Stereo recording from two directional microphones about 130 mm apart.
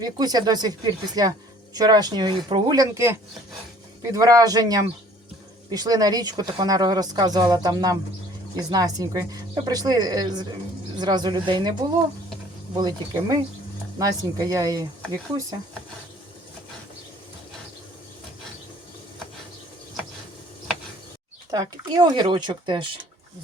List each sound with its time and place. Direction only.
0.0 s speech: 30° right (ahead or behind)
12.7 s speech: 30° right (ahead or behind)
21.5 s speech: 30° right (ahead or behind)